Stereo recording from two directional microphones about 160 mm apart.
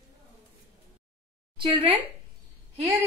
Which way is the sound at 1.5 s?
35° right (ahead or behind).